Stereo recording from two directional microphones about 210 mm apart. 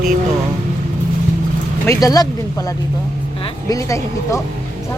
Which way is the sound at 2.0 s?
15° left (ahead or behind).